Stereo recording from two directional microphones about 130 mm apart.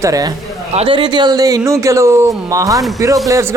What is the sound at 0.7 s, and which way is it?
Speech, 45° right (ahead or behind).